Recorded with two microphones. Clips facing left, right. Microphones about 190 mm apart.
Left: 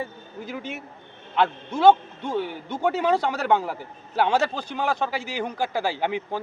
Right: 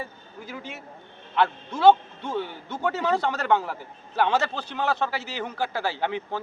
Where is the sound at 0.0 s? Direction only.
20° left (ahead or behind).